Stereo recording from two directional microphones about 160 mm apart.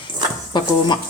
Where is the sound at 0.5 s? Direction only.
30° left (ahead or behind).